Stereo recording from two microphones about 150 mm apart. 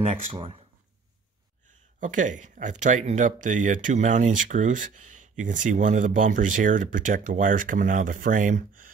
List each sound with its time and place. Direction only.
0.0 s speech: 45° right (ahead or behind)
2.0 s speech: 60° right (ahead or behind)